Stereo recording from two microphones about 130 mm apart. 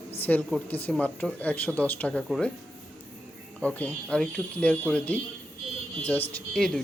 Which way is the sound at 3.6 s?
10° left (ahead or behind).